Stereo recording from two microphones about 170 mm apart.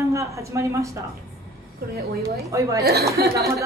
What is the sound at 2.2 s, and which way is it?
Speech, 20° right (ahead or behind).